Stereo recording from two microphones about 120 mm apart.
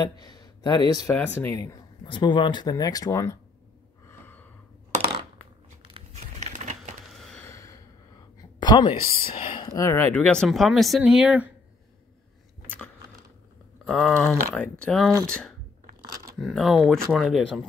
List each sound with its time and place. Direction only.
0.0 s a sound: 35° left (ahead or behind)
1.0 s speech: 15° left (ahead or behind)
1.6 s speech: 25° left (ahead or behind)
2.0 s speech: 40° left (ahead or behind); by 3.3 s 25° left (ahead or behind)
6.1 s typing: 80° right
7.1 s a sound: 5° left (ahead or behind)
7.4 s gasp: 25° left (ahead or behind)
8.4 s speech: 35° left (ahead or behind)
9.8 s speech: 20° left (ahead or behind); by 11.5 s 10° right (ahead or behind)
12.6 s a sound: 15° left (ahead or behind)
13.8 s speech: 5° left (ahead or behind)